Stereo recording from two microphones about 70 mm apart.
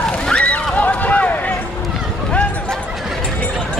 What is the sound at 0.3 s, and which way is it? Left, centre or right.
Slosh, centre.